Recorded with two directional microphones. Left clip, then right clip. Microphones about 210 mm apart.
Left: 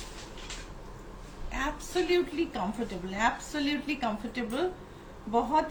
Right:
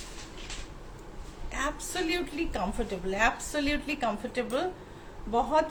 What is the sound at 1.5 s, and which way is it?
A woman's voice, 45° right (ahead or behind).